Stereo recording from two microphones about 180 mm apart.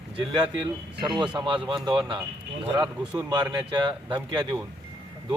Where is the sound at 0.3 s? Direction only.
25° right (ahead or behind).